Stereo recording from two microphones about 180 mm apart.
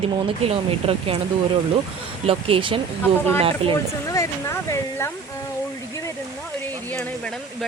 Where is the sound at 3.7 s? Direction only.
15° left (ahead or behind).